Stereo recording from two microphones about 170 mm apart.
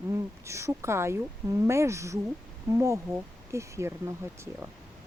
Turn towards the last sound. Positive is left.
turn(degrees=-15)  # may be behind; listen again after turning